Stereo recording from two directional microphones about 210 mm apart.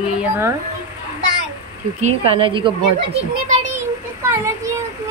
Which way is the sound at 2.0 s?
30° right (ahead or behind).